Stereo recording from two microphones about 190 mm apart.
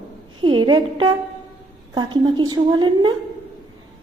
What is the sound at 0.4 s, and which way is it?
A woman's voice, 25° right (ahead or behind).